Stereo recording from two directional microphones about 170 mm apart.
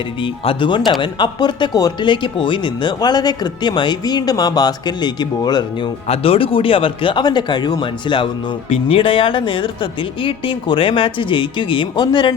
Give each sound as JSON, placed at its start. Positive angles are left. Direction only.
{"t": 0.2, "sound": "speech", "side_deg": 30}